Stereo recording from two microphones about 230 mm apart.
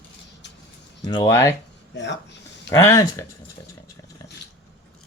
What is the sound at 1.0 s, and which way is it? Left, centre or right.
Speech, centre.